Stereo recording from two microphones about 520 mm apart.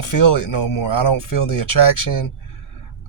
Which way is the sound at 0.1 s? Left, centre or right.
Left.